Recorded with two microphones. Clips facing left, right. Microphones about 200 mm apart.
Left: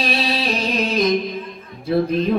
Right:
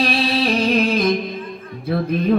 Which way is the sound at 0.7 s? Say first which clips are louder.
Right 4 dB; 55° right (ahead or behind).